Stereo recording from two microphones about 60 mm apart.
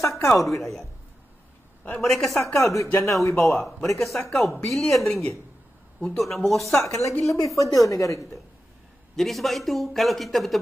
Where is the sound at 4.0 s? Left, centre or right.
Centre.